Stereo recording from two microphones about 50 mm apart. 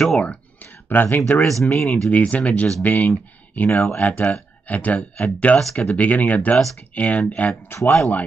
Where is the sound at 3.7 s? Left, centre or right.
Left.